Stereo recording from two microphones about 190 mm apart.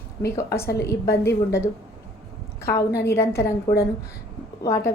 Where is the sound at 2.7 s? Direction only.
15° left (ahead or behind).